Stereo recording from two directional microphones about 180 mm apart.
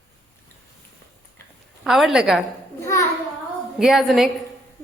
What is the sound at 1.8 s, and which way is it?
Speech, centre (ahead or behind).